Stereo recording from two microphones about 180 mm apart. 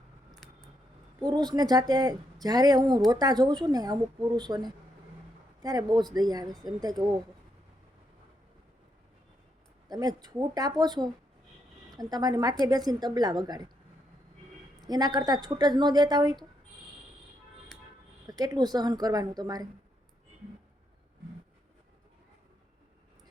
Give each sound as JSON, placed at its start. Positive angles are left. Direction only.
{"t": 1.2, "sound": "speech", "side_deg": -25}
{"t": 9.9, "sound": "speech", "side_deg": -20}
{"t": 14.8, "sound": "speech", "side_deg": -20}
{"t": 18.3, "sound": "speech", "side_deg": -20}